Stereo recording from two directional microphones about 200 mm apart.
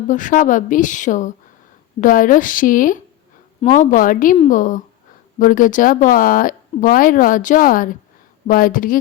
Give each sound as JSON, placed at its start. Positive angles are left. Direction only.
{"t": 0.1, "sound": "a woman's voice", "side_deg": 40}